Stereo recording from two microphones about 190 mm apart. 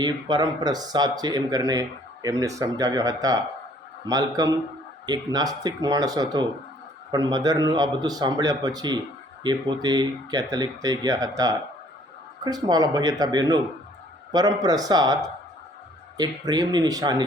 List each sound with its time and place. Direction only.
0.0 s speech: 20° right (ahead or behind)